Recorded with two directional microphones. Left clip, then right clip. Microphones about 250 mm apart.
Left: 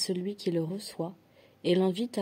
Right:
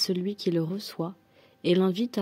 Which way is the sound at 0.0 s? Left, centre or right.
Right.